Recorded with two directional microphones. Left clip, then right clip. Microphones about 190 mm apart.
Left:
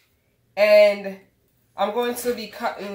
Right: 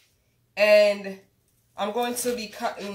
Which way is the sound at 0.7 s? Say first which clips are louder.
Left 4 dB; 20° left (ahead or behind).